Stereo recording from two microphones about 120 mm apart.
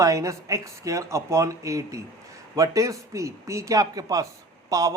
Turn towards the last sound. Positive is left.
turn(degrees=-30)  # may be behind; listen again after turning